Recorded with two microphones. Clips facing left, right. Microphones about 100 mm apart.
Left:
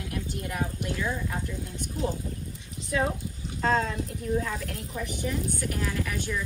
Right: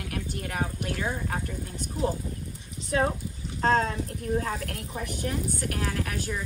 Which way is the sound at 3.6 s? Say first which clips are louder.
Right 2 dB; 40° right (ahead or behind).